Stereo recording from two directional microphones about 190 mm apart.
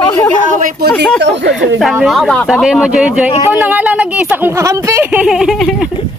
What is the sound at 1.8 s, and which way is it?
Speech, centre (ahead or behind).